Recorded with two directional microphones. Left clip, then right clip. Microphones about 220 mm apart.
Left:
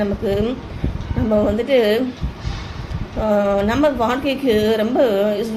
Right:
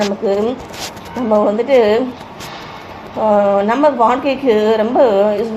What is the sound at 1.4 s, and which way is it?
Speech, 10° left (ahead or behind).